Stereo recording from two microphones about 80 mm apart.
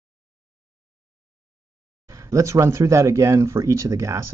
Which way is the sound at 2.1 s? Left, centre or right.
Right.